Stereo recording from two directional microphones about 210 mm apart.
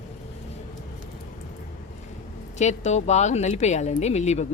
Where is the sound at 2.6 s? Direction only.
35° left (ahead or behind).